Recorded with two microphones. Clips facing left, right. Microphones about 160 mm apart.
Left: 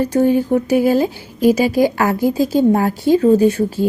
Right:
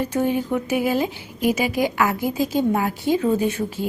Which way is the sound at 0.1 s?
40° left (ahead or behind).